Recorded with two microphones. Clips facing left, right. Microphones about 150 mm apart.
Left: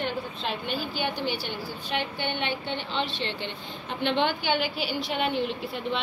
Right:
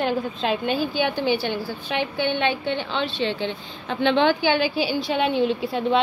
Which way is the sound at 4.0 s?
90° right.